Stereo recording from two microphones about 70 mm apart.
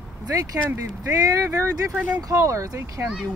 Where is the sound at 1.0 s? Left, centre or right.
Right.